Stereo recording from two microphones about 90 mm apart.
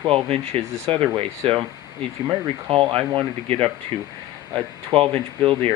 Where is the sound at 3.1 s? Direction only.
80° right.